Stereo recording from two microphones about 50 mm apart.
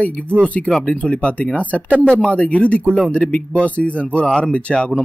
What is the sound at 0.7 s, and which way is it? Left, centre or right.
Speech, centre.